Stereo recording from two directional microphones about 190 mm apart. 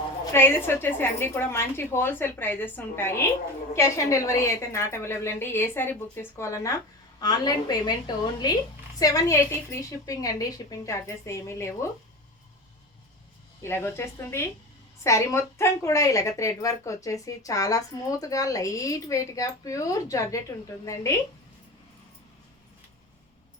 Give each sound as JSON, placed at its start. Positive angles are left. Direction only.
{"t": 0.3, "sound": "a woman's voice", "side_deg": 10}
{"t": 13.6, "sound": "a woman's voice", "side_deg": 15}